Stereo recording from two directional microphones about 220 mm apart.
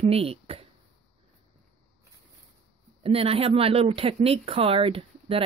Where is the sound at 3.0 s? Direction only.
25° right (ahead or behind).